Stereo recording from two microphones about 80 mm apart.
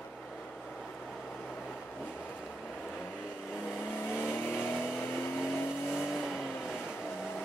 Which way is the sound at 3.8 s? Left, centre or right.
Left.